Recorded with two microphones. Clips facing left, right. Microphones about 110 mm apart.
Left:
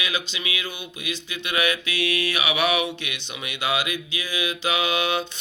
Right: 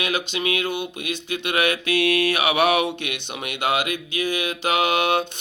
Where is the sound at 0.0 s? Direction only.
55° right (ahead or behind).